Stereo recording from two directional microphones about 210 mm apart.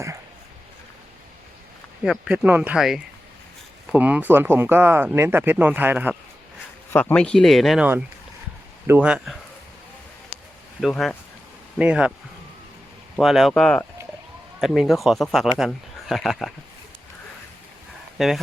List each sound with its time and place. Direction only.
2.0 s speech: 5° right (ahead or behind)
6.9 s speech: 5° left (ahead or behind)
10.8 s speech: centre (ahead or behind)
13.1 s speech: centre (ahead or behind)
18.2 s speech: centre (ahead or behind)